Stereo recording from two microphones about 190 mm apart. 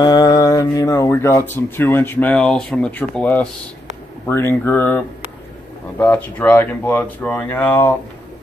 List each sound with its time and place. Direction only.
0.0 s speech: 20° left (ahead or behind)